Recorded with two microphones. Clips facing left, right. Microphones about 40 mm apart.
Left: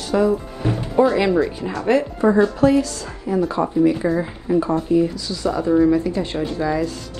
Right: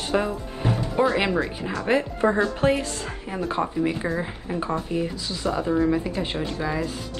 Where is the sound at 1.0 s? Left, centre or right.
Right.